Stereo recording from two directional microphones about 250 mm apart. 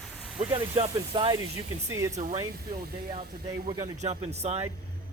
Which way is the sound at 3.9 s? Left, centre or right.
Right.